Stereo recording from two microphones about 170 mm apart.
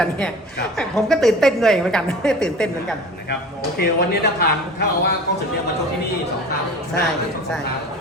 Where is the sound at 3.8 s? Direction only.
70° left (ahead or behind).